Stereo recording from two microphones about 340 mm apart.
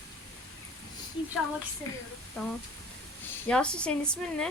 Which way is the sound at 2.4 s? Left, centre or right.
Centre.